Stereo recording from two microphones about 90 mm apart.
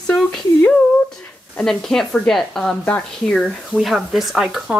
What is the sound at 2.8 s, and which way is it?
Speech, 15° left (ahead or behind).